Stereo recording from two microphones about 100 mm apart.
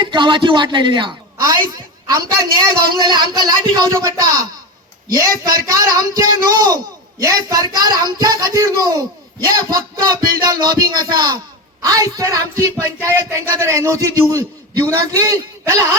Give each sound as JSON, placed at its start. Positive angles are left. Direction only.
{"t": 0.0, "sound": "a man's voice", "side_deg": -50}
{"t": 3.9, "sound": "speech", "side_deg": -35}